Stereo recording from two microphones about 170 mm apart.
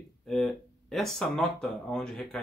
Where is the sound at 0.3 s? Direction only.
Centre (ahead or behind).